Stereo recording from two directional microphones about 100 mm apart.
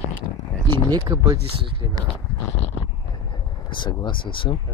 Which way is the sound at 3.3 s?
50° left (ahead or behind).